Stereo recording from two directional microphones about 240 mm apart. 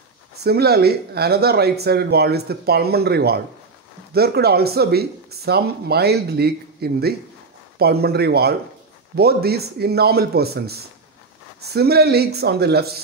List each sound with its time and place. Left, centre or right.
0.4 s speech: right